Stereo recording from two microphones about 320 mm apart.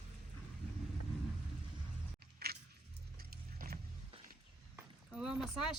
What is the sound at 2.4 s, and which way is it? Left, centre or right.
Biting, right.